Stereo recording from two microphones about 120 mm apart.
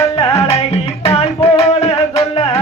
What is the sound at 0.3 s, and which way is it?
Music, 60° left (ahead or behind).